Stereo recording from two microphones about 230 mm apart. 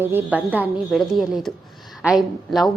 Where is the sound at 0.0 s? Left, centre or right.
Centre.